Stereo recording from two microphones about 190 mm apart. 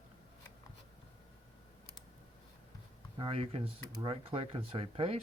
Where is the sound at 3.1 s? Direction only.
30° right (ahead or behind).